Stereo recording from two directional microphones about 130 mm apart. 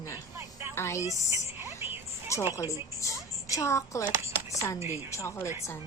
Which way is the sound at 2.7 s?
25° left (ahead or behind).